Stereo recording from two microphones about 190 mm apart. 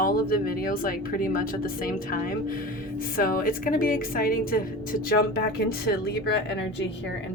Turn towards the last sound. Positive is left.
turn(degrees=60)  # may be behind; listen again after turning